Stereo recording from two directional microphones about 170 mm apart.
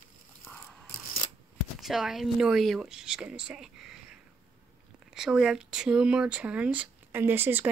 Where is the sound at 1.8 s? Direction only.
Centre (ahead or behind).